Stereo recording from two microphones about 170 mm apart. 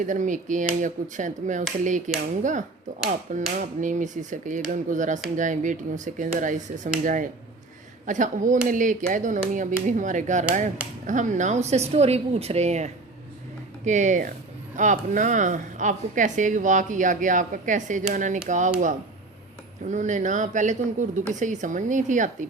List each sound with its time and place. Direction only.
0.0 s a woman's voice: 50° right (ahead or behind)
19.9 s speech: 45° right (ahead or behind)